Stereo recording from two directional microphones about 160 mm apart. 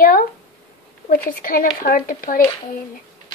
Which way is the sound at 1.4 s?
60° left (ahead or behind).